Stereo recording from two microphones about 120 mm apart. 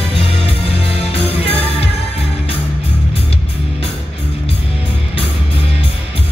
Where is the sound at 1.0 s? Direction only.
55° left (ahead or behind).